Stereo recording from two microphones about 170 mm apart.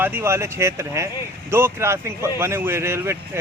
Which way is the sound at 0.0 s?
15° right (ahead or behind).